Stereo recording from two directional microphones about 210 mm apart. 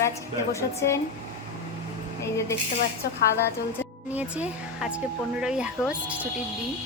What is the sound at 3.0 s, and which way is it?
Speech, 45° left (ahead or behind).